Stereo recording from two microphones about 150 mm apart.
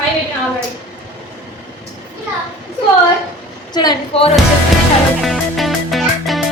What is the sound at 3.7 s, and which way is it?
Speech, 25° left (ahead or behind).